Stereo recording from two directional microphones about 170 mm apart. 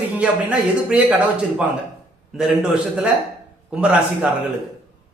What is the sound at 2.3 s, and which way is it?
A man's voice, 5° right (ahead or behind).